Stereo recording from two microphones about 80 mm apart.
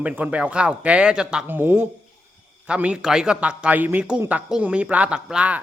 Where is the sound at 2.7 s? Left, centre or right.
Centre.